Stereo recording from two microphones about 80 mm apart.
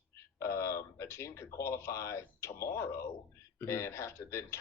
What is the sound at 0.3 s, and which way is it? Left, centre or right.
Speech, left.